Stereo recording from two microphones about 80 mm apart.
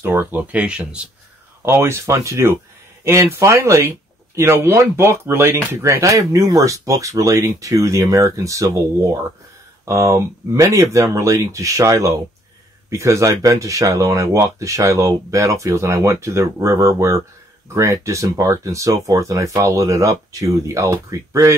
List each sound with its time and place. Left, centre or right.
0.0 s speech: right
1.6 s speech: right